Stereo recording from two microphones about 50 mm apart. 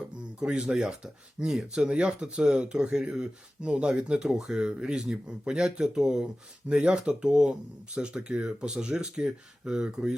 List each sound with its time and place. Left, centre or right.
0.3 s speech: centre